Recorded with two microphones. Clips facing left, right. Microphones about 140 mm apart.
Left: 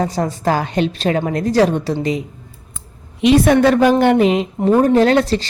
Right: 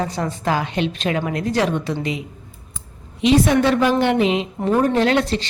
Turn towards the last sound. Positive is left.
turn(degrees=35)  # may be behind; listen again after turning